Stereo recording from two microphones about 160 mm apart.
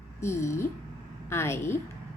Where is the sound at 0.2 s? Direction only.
15° left (ahead or behind).